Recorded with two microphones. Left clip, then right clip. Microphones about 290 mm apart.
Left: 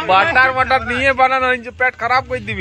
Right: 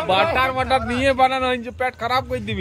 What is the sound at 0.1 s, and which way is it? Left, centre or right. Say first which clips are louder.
Speech: left 6 dB; centre.